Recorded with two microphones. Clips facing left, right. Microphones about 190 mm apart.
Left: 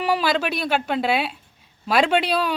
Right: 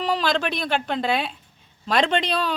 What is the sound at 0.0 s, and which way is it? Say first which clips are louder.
A man's voice: left 2 dB; 10° left (ahead or behind).